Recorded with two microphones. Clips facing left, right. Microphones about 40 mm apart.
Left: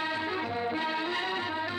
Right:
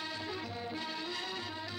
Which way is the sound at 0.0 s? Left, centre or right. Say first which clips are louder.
Left 9 dB; left.